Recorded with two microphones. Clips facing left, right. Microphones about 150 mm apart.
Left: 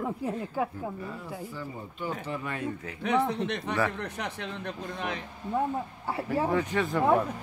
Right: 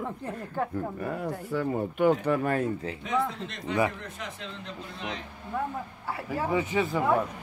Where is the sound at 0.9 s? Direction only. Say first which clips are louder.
Right 6 dB; 65° right (ahead or behind).